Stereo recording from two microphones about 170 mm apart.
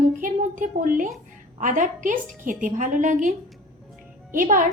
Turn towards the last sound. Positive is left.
turn(degrees=-50)  # may be behind; listen again after turning